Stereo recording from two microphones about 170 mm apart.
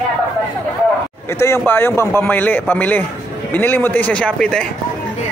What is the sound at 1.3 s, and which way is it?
Speech, 15° left (ahead or behind).